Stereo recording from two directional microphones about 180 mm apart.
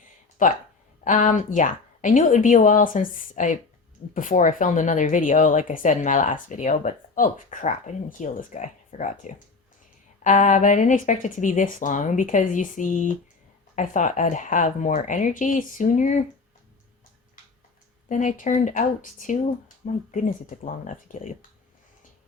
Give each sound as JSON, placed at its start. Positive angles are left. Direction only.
{"t": 0.4, "sound": "speech", "side_deg": 45}
{"t": 18.1, "sound": "speech", "side_deg": 45}